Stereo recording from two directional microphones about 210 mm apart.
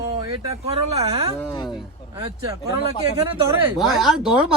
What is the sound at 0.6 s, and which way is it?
Speech, 30° right (ahead or behind).